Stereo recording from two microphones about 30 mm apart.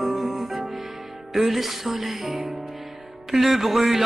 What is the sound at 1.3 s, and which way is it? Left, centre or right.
Music, centre.